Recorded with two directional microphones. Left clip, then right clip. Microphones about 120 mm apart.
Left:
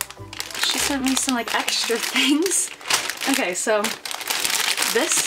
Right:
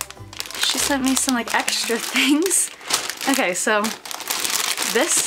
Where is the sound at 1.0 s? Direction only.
10° right (ahead or behind).